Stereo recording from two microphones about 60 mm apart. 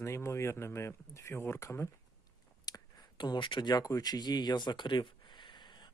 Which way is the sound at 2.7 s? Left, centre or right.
Left.